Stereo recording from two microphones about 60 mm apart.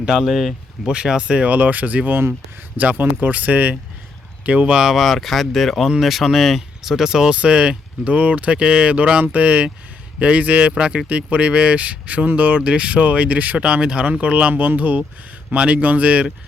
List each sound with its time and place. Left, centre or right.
0.0 s speech: centre
0.9 s speech: centre
4.7 s speech: centre